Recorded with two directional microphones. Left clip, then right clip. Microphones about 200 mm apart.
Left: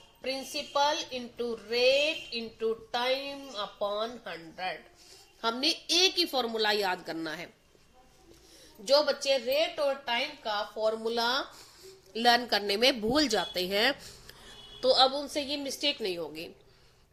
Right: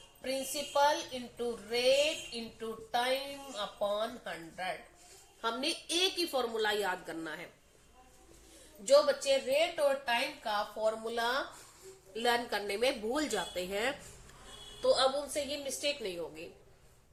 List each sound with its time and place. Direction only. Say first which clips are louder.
0.2 s a woman's voice: left 2 dB; 40° left (ahead or behind)
8.8 s a woman's voice: left 1 dB; 50° left (ahead or behind)